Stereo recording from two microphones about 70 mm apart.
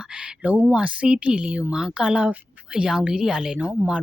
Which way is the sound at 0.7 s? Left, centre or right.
Centre.